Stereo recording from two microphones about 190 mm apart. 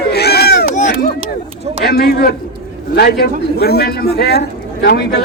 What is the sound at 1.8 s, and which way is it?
Speech, 55° left (ahead or behind).